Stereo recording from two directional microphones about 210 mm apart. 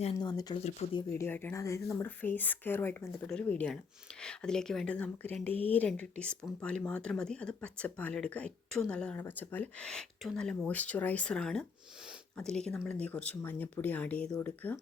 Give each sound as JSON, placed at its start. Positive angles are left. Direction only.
{"t": 0.2, "sound": "speech", "side_deg": 20}
{"t": 0.6, "sound": "speech", "side_deg": 30}
{"t": 1.1, "sound": "speech", "side_deg": 10}